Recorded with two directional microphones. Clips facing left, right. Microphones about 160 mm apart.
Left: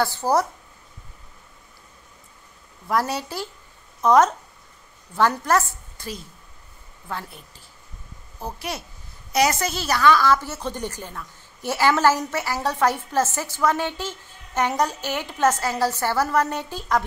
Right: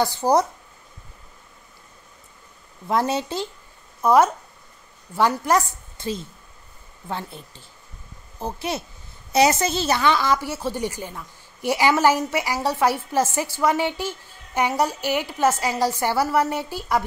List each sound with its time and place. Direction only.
0.0 s a woman's voice: 15° right (ahead or behind)
2.9 s speech: 25° right (ahead or behind)
4.0 s a woman's voice: 10° right (ahead or behind)